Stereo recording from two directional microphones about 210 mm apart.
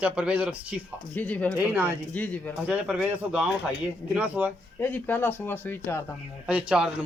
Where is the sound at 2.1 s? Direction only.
5° left (ahead or behind).